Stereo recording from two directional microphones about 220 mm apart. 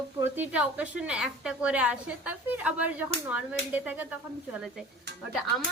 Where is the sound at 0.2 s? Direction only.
5° right (ahead or behind).